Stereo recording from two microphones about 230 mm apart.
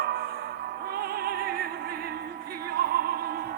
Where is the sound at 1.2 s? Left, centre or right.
Right.